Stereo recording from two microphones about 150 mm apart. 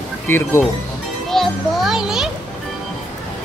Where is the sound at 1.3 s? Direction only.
Centre (ahead or behind).